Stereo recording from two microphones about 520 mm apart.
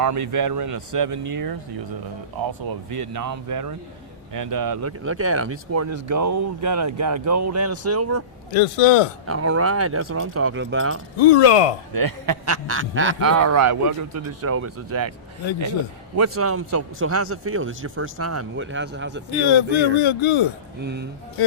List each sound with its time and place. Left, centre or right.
0.0 s speech: right
2.9 s speech: right
8.5 s a man's voice: left
9.2 s speech: right
11.2 s speech: left
11.9 s speech: right
12.6 s speech: right
16.1 s speech: right
19.5 s speech: left
20.8 s speech: centre